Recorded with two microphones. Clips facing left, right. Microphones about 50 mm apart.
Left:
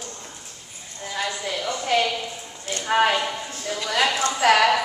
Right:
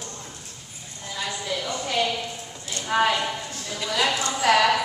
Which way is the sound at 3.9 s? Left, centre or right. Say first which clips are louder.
Left 2 dB; left.